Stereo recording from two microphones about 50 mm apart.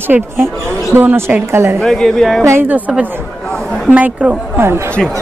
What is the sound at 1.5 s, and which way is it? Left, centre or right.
Speech, right.